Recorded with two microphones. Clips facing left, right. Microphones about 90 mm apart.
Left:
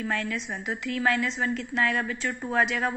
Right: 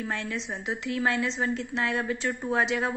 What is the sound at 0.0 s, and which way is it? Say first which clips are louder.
A woman's voice: left 2 dB; 30° right (ahead or behind).